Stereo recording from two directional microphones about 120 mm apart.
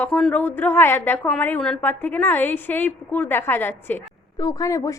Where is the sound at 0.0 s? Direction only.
10° left (ahead or behind).